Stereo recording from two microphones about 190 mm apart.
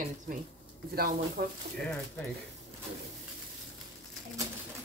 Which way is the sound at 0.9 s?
50° right (ahead or behind).